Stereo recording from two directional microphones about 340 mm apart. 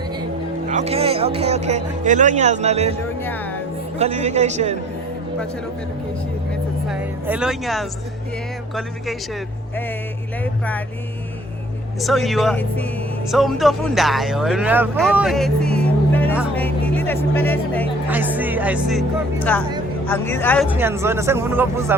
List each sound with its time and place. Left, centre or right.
0.7 s speech: centre
3.2 s music: centre
3.9 s speech: centre
6.8 s music: centre
8.7 s speech: centre
11.9 s speech: centre
18.1 s speech: centre